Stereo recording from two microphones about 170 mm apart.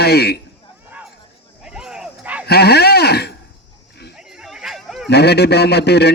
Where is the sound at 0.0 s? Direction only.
70° left (ahead or behind).